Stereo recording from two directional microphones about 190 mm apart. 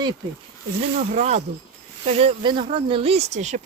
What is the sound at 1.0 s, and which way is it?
Speech, 35° right (ahead or behind).